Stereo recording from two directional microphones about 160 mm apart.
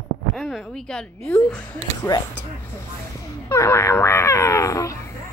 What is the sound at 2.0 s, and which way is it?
Speech, 15° left (ahead or behind).